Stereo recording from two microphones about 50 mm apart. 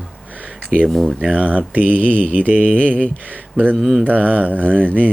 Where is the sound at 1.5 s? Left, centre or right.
Right.